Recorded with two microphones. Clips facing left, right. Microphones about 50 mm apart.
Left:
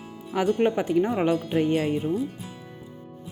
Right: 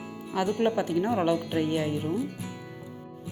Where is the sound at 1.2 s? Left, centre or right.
Left.